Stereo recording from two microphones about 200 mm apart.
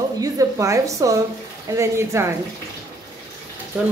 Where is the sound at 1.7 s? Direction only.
15° right (ahead or behind).